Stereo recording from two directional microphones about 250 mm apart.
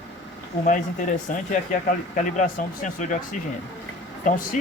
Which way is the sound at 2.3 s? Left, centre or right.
Left.